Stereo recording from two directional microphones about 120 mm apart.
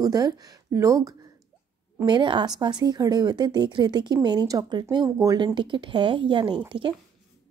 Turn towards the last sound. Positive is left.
turn(degrees=-45)  # may be behind; listen again after turning